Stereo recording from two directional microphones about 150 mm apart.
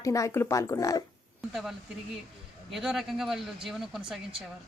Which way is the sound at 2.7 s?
Centre (ahead or behind).